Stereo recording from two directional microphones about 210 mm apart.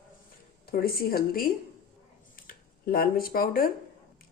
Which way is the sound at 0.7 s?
45° left (ahead or behind).